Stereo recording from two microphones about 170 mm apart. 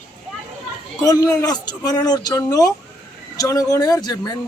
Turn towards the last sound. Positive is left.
turn(degrees=20)  # may be behind; listen again after turning